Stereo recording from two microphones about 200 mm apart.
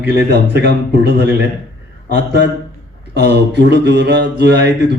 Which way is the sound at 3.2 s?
55° right (ahead or behind).